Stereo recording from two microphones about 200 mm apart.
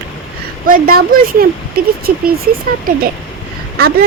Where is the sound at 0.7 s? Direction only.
45° right (ahead or behind).